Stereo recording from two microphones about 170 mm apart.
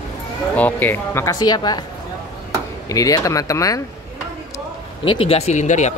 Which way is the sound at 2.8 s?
20° left (ahead or behind).